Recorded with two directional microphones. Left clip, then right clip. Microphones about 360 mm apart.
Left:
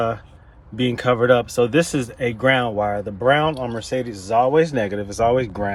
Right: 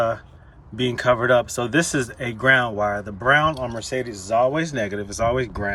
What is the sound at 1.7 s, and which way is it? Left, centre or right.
Speech, centre.